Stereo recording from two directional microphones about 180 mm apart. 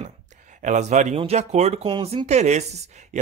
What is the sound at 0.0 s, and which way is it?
Speech, 40° right (ahead or behind).